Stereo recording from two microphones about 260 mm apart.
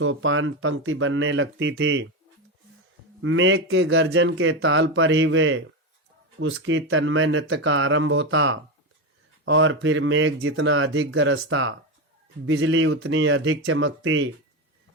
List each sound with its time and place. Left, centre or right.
0.0 s a man's voice: right
3.2 s a man's voice: right